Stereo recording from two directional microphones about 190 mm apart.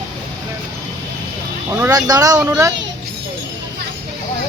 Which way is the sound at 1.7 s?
15° right (ahead or behind).